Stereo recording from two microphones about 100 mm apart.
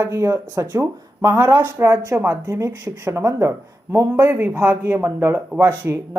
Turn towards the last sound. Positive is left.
turn(degrees=-20)  # may be behind; listen again after turning